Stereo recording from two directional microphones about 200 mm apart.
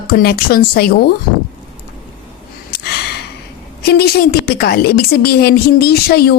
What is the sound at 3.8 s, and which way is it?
A woman's voice, 55° left (ahead or behind).